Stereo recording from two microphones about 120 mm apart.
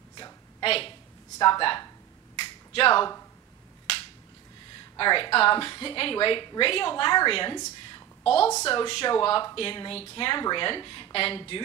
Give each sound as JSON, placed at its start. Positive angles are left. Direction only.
{"t": 0.2, "sound": "a sound", "side_deg": 45}
{"t": 1.4, "sound": "speech", "side_deg": 45}
{"t": 2.3, "sound": "finger snapping", "side_deg": 50}
{"t": 4.9, "sound": "a woman's voice", "side_deg": 45}
{"t": 7.5, "sound": "a sound", "side_deg": 35}
{"t": 8.6, "sound": "a woman's voice", "side_deg": 40}